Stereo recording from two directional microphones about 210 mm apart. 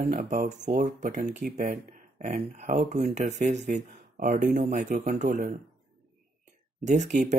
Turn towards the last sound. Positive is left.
turn(degrees=-35)  # may be behind; listen again after turning